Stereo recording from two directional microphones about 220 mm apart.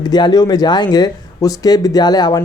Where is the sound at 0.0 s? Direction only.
20° left (ahead or behind).